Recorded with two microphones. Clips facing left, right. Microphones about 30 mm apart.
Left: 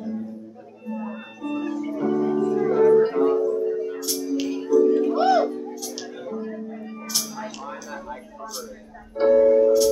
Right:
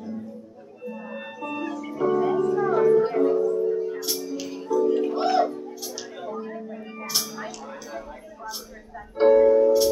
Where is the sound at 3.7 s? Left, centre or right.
Centre.